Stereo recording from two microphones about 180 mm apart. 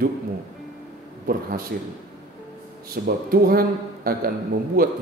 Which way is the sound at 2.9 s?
55° right (ahead or behind).